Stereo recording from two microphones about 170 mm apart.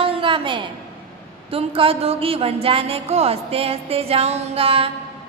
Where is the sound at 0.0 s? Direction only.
30° right (ahead or behind).